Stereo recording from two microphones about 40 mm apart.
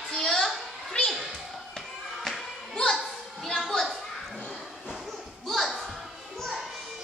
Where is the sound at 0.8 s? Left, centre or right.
Centre.